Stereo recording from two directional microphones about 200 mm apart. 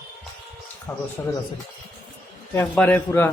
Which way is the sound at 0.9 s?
10° left (ahead or behind).